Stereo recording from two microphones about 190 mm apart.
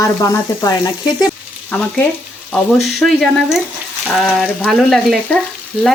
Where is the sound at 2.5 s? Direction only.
Centre (ahead or behind).